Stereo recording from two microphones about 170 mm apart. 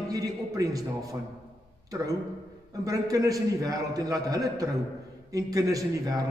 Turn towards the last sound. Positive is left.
turn(degrees=-20)  # may be behind; listen again after turning